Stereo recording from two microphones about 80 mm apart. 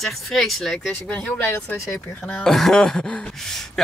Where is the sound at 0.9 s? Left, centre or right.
Centre; by 2.2 s left.